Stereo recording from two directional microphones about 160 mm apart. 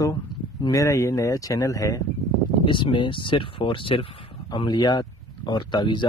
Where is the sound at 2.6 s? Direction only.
30° left (ahead or behind).